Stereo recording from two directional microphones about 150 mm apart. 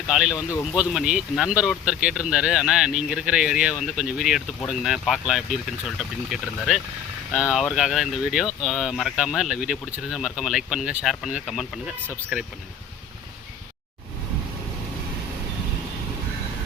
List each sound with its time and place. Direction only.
0.1 s speech: 5° right (ahead or behind)
0.3 s speech: 20° left (ahead or behind)
0.8 s speech: 5° right (ahead or behind)